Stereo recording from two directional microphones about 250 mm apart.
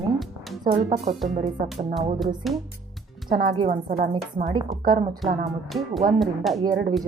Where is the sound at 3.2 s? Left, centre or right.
Right.